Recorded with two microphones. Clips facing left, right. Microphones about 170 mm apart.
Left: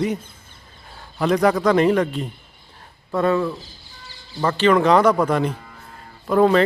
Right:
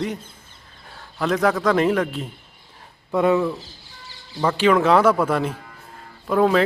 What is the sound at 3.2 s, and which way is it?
A man's voice, 15° right (ahead or behind).